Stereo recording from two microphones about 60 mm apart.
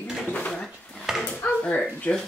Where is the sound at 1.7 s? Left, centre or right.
Centre.